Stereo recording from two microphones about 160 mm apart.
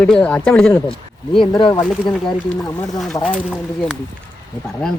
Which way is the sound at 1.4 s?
30° left (ahead or behind).